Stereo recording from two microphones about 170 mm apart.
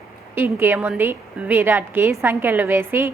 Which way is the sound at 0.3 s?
15° right (ahead or behind).